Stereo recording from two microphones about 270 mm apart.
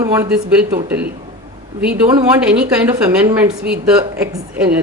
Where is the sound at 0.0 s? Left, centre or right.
Centre.